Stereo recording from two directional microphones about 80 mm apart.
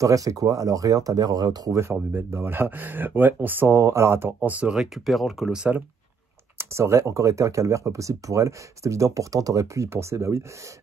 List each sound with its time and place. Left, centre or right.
0.0 s speech: right
1.7 s speech: right
4.4 s speech: centre
4.7 s speech: centre
6.6 s speech: right
9.8 s speech: right